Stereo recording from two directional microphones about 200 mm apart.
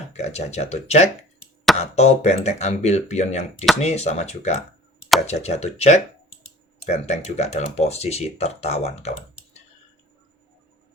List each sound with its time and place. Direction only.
0.1 s speech: 35° left (ahead or behind)